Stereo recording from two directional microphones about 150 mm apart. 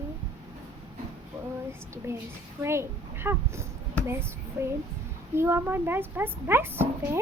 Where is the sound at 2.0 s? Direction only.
20° right (ahead or behind).